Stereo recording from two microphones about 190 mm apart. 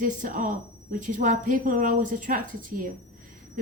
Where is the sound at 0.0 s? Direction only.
45° right (ahead or behind).